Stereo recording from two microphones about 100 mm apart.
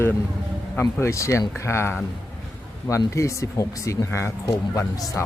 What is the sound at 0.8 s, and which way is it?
Speech, 20° left (ahead or behind).